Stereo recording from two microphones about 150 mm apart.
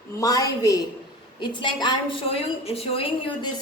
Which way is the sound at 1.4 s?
30° left (ahead or behind).